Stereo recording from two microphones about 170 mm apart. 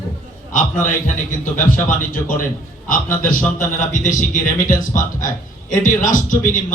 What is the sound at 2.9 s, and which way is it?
A man's voice, 55° left (ahead or behind).